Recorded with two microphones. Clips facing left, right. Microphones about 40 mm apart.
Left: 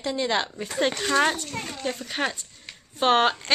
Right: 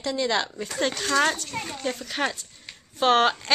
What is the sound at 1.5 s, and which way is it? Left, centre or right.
Speech, centre.